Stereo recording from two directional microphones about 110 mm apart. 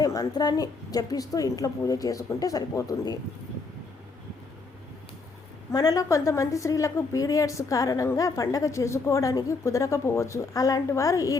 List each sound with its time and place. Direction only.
0.0 s a woman's voice: 35° left (ahead or behind)
5.7 s a woman's voice: 35° left (ahead or behind)